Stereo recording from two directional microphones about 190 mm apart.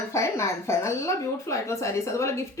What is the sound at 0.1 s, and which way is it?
Speech, 15° left (ahead or behind).